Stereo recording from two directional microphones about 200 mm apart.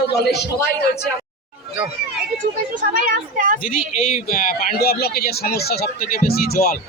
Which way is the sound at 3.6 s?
45° left (ahead or behind).